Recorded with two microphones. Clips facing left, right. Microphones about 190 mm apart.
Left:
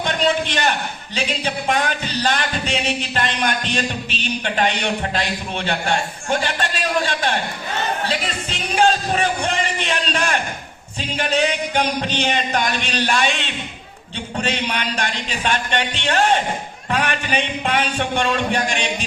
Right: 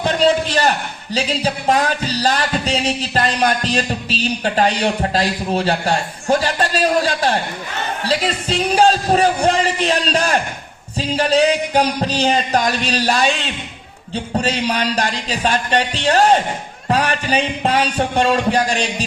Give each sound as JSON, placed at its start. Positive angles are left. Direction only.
{"t": 0.0, "sound": "a man's voice", "side_deg": -35}